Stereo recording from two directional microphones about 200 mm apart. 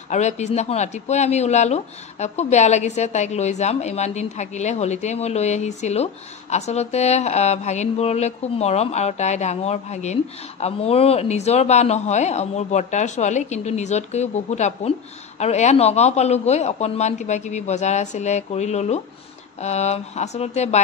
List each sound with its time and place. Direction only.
0.1 s speech: 35° left (ahead or behind)